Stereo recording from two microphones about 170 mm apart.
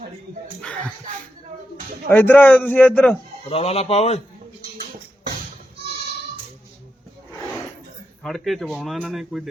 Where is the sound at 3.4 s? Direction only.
35° left (ahead or behind).